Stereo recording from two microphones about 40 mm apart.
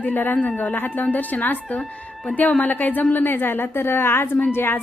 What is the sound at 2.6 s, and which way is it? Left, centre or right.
Speech, left.